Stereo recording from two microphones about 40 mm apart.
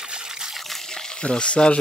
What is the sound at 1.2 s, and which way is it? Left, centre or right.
Speech, left.